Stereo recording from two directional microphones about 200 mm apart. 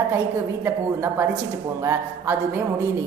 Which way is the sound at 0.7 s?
10° right (ahead or behind).